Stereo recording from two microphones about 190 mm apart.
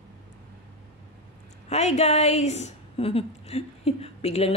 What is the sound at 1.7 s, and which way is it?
A woman's voice, 35° left (ahead or behind).